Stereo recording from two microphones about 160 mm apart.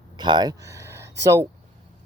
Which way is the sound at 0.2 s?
25° right (ahead or behind).